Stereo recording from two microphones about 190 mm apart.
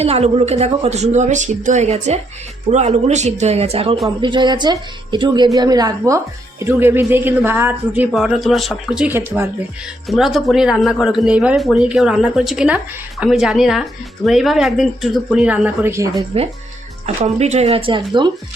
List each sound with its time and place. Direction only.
0.0 s speech: 35° right (ahead or behind); by 16.0 s 15° right (ahead or behind)
16.3 s speech: 30° right (ahead or behind)